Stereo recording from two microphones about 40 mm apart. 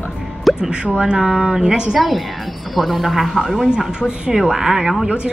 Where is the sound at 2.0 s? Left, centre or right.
Centre.